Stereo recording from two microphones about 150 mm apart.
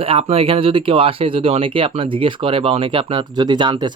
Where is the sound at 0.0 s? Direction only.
40° right (ahead or behind).